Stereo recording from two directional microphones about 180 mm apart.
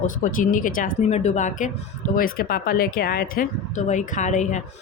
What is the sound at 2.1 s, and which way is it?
Speech, 55° left (ahead or behind).